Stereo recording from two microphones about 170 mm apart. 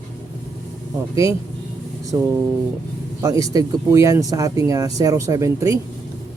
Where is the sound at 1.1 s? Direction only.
20° right (ahead or behind).